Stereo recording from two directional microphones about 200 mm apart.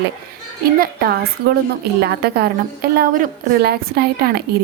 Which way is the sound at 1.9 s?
55° right (ahead or behind).